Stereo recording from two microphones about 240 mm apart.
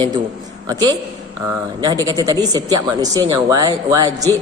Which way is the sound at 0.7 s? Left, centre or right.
Centre.